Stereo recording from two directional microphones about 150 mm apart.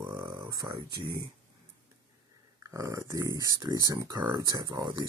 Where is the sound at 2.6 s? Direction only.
20° right (ahead or behind).